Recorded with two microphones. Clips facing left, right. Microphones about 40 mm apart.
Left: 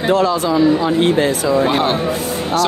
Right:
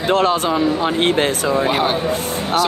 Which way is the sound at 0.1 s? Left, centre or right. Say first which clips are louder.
Left 1 dB; right.